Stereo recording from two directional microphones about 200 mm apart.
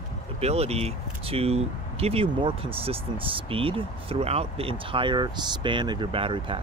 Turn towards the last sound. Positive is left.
turn(degrees=-25)  # may be behind; listen again after turning